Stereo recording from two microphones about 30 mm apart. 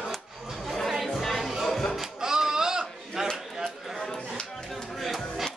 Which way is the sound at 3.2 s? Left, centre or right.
Centre.